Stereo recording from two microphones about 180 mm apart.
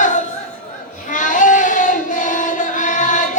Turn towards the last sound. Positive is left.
turn(degrees=45)  # may be behind; listen again after turning